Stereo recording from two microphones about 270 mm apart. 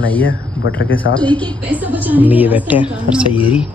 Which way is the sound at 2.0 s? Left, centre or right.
Centre.